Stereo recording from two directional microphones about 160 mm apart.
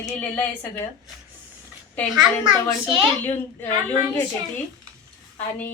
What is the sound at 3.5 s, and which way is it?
Speech, 10° left (ahead or behind).